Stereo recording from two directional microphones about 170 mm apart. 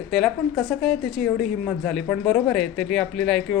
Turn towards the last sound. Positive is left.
turn(degrees=5)  # may be behind; listen again after turning